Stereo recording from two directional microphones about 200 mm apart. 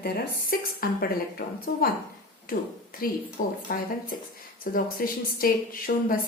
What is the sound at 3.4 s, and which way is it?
Speech, 45° left (ahead or behind).